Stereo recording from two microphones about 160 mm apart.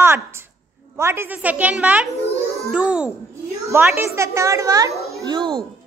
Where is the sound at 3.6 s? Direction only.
15° right (ahead or behind).